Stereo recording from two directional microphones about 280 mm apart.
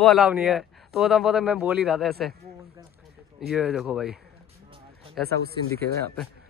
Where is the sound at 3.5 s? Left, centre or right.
Centre.